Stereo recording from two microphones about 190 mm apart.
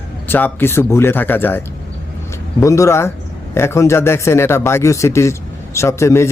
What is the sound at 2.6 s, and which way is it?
A man's voice, 15° left (ahead or behind).